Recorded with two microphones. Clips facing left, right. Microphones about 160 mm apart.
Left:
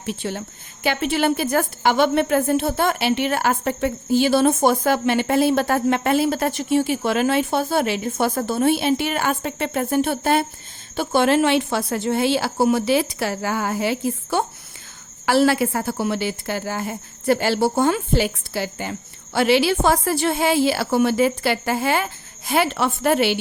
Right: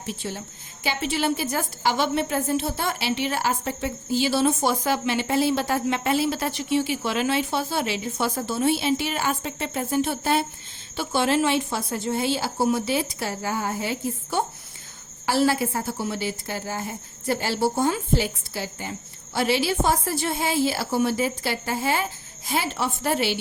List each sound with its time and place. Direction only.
0.0 s a woman's voice: 65° left (ahead or behind)